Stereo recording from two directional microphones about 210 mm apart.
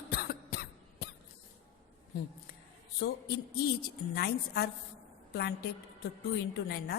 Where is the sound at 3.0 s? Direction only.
50° left (ahead or behind).